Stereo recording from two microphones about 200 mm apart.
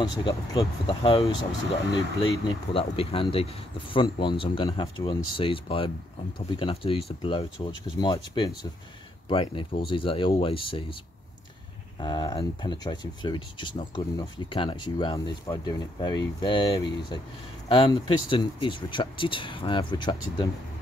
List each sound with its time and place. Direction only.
0.0 s speech: 20° left (ahead or behind)
12.0 s speech: 20° left (ahead or behind)